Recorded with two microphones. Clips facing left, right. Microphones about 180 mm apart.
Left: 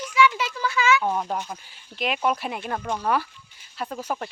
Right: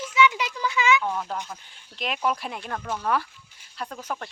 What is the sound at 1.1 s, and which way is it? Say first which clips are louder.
Speech: left 3 dB; 15° left (ahead or behind).